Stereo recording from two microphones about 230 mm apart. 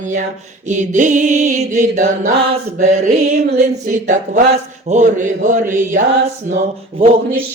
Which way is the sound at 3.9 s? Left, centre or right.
Right.